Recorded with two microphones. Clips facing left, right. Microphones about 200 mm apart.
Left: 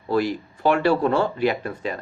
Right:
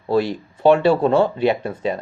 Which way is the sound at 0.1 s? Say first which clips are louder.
Right 3 dB; 25° right (ahead or behind).